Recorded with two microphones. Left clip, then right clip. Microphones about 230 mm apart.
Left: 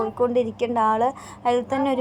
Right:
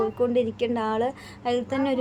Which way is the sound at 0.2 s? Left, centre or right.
Centre.